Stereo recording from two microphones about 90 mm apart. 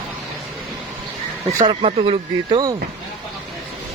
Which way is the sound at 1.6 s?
90° right.